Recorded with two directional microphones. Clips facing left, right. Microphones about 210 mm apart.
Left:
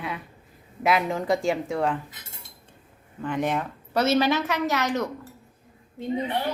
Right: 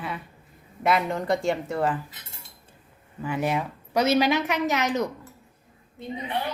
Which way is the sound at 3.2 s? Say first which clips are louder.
Even; 10° right (ahead or behind).